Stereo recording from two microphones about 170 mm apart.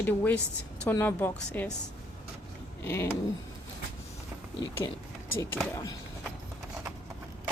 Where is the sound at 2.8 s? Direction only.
15° left (ahead or behind).